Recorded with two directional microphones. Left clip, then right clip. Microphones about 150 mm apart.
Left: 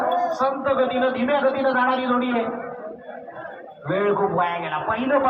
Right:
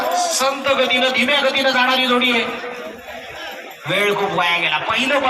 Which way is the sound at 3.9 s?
35° left (ahead or behind).